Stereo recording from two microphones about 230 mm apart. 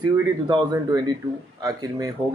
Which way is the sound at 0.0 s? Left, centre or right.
Centre.